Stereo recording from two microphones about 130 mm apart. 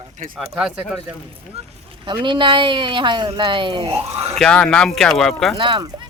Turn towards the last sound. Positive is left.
turn(degrees=-40)  # may be behind; listen again after turning